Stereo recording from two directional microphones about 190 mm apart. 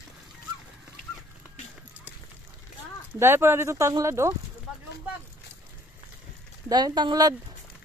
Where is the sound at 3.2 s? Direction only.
10° right (ahead or behind).